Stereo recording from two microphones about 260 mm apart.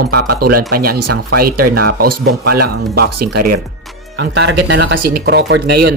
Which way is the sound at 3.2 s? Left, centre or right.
Right.